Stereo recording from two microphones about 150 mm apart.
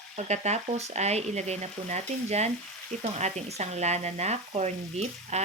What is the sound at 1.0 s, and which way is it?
Stir, 45° right (ahead or behind).